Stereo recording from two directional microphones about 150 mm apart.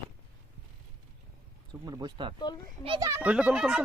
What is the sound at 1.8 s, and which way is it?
Speech, 25° right (ahead or behind).